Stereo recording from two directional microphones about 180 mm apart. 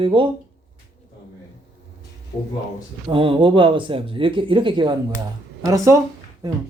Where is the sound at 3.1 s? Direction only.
30° right (ahead or behind).